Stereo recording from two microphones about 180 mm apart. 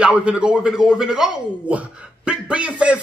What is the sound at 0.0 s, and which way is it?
A child's voice, 5° right (ahead or behind).